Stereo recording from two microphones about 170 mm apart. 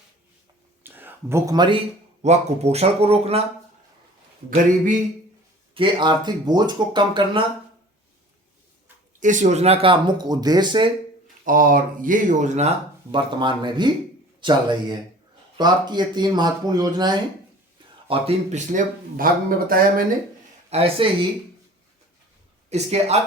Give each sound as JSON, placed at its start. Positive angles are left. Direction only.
{"t": 0.8, "sound": "a sound", "side_deg": -10}
{"t": 2.2, "sound": "speech", "side_deg": -40}
{"t": 5.7, "sound": "speech", "side_deg": -30}
{"t": 9.2, "sound": "speech", "side_deg": -45}
{"t": 11.4, "sound": "speech", "side_deg": -55}
{"t": 18.1, "sound": "speech", "side_deg": -40}
{"t": 20.7, "sound": "speech", "side_deg": -35}
{"t": 22.7, "sound": "speech", "side_deg": -40}